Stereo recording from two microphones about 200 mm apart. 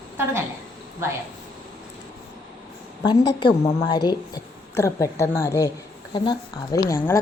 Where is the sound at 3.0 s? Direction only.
20° left (ahead or behind).